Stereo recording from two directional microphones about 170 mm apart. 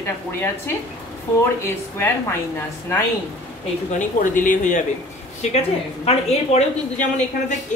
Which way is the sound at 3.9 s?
50° left (ahead or behind).